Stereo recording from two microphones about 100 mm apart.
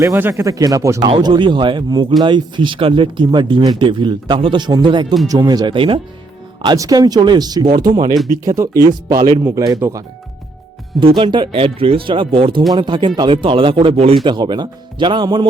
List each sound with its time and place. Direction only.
0.2 s speech: 25° right (ahead or behind)
1.0 s speech: 55° right (ahead or behind)
5.3 s speech: 40° right (ahead or behind)
5.7 s speech: 60° right (ahead or behind)
6.7 s speech: 40° right (ahead or behind)
8.4 s speech: 30° right (ahead or behind)
9.4 s speech: 30° right (ahead or behind)
11.2 s speech: 55° right (ahead or behind)
12.7 s speech: 50° right (ahead or behind); by 14.2 s 80° right
14.3 s speech: 50° right (ahead or behind)